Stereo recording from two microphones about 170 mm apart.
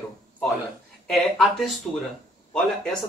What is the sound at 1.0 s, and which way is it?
Speech, centre (ahead or behind).